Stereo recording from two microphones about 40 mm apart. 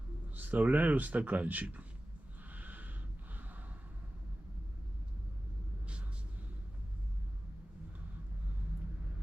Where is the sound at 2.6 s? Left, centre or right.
Right.